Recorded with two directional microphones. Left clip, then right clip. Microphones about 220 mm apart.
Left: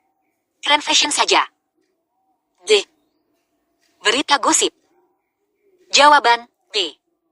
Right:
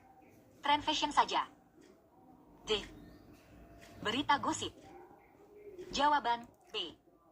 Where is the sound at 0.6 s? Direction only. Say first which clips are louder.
Left 16 dB; 90° left.